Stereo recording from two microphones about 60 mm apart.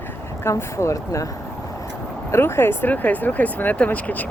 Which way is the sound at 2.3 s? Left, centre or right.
Left.